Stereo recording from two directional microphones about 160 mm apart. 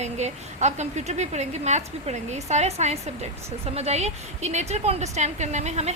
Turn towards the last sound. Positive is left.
turn(degrees=-45)  # may be behind; listen again after turning